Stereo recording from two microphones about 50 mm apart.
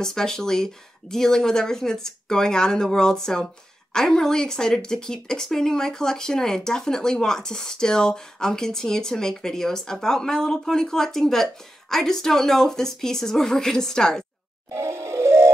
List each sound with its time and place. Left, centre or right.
0.0 s speech: centre
14.7 s music: right